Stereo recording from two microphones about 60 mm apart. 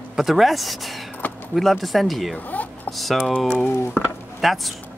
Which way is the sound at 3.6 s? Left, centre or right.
Left.